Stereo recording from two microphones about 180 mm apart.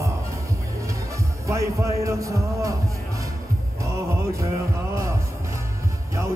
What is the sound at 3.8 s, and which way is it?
Music, 15° right (ahead or behind).